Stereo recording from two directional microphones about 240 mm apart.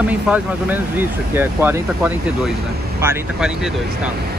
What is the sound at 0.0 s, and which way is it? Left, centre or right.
Speech, centre.